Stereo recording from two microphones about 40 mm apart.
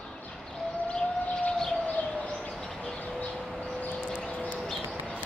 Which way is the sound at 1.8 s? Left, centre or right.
Left.